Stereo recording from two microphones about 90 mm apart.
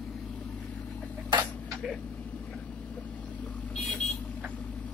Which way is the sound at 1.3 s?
60° right (ahead or behind).